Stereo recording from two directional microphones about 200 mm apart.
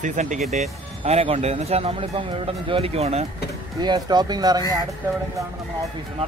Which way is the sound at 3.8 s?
20° right (ahead or behind).